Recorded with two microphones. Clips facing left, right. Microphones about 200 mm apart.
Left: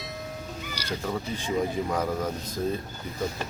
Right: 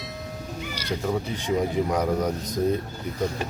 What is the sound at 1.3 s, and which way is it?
Speech, 15° right (ahead or behind).